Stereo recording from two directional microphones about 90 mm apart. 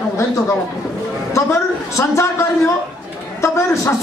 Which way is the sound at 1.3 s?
30° left (ahead or behind).